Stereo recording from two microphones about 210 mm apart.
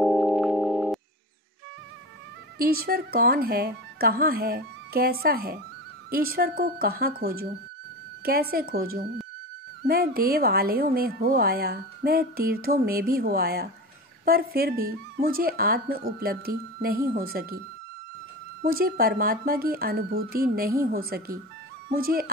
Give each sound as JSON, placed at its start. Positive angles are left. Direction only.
{"t": 0.0, "sound": "music", "side_deg": 0}
{"t": 2.6, "sound": "a woman's voice", "side_deg": -45}
{"t": 18.6, "sound": "a woman's voice", "side_deg": -45}